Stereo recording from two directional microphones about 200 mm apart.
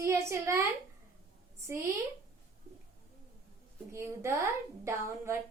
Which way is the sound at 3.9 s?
15° right (ahead or behind).